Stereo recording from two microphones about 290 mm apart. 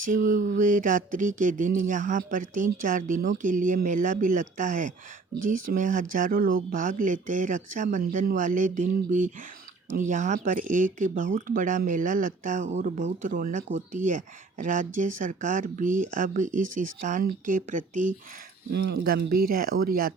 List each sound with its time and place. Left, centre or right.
0.0 s speech: right